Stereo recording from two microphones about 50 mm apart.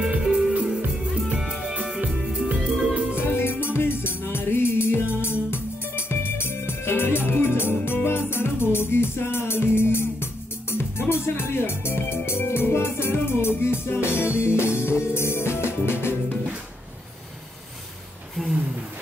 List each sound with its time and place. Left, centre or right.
0.0 s music: centre
3.2 s music: left